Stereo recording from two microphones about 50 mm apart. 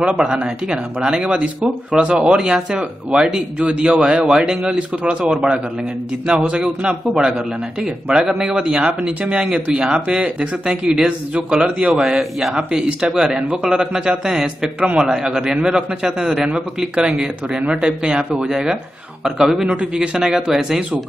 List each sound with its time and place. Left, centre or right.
0.1 s speech: centre
4.6 s speech: right
12.2 s speech: centre
15.0 s speech: centre